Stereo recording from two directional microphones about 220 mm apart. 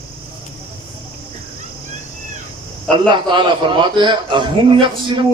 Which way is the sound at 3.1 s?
20° right (ahead or behind).